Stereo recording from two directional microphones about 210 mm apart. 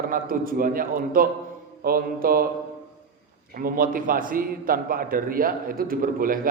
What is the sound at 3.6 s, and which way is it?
A man's voice, 45° right (ahead or behind).